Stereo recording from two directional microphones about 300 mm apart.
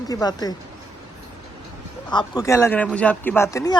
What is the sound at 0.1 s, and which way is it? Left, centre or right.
Speech, centre.